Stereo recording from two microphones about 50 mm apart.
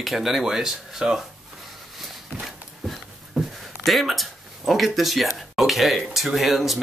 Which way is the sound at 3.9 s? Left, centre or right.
Centre.